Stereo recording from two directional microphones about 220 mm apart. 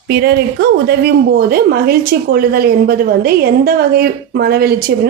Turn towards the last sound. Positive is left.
turn(degrees=-45)  # may be behind; listen again after turning